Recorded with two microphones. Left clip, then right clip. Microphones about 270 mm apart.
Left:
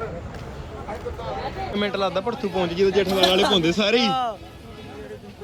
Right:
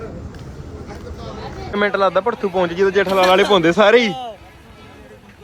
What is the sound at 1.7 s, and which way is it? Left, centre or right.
Speech, centre.